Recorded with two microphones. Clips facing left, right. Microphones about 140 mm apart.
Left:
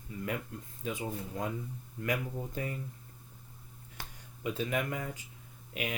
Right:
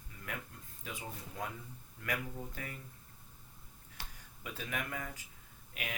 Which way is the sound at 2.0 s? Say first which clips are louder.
Left 5 dB; 25° left (ahead or behind).